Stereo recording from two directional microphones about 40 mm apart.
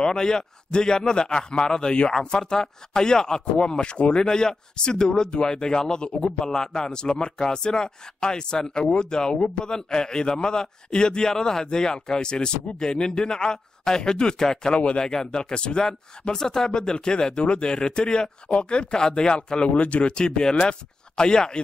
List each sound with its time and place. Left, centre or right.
0.0 s speech: centre